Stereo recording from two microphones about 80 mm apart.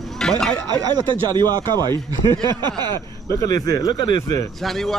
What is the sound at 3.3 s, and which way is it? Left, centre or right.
Speech, left.